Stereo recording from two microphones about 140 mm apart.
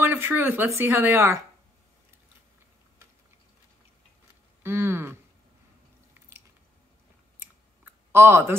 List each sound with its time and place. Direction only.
0.0 s a woman's voice: 15° right (ahead or behind)
4.6 s a woman's voice: 15° right (ahead or behind)
7.3 s clicking: 15° right (ahead or behind)